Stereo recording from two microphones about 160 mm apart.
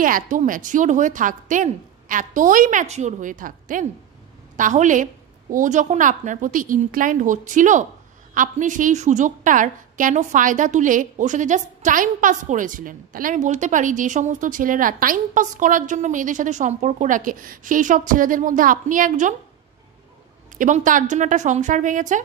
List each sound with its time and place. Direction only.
0.0 s a woman's voice: 55° right (ahead or behind)
20.5 s a woman's voice: 55° right (ahead or behind)